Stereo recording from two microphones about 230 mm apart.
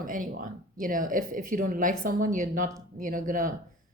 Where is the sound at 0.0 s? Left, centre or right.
Right.